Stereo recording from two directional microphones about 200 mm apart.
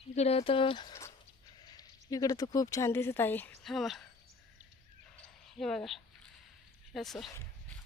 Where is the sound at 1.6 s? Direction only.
20° left (ahead or behind); by 4.0 s centre (ahead or behind).